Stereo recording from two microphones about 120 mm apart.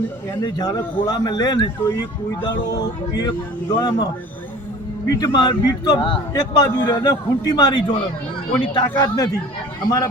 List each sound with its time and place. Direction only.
0.4 s speech: 35° left (ahead or behind)